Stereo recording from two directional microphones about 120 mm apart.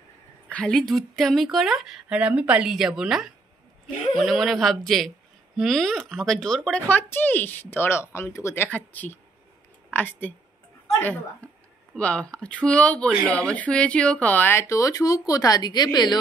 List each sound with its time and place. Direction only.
0.5 s speech: 10° left (ahead or behind)
6.9 s a woman's voice: 15° left (ahead or behind); by 16.2 s 35° left (ahead or behind)